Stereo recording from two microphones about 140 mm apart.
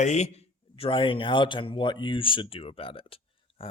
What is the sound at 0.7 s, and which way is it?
Speech, 40° left (ahead or behind).